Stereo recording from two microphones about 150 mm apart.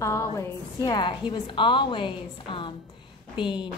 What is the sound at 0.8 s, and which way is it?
A woman's voice, 30° left (ahead or behind).